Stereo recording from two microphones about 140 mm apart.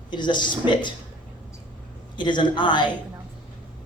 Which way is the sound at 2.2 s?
35° left (ahead or behind).